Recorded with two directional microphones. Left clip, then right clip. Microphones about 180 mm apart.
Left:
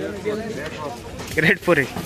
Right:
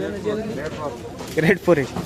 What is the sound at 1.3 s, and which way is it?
Speech, 10° right (ahead or behind).